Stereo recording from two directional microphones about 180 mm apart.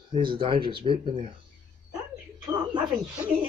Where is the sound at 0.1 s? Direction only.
30° right (ahead or behind).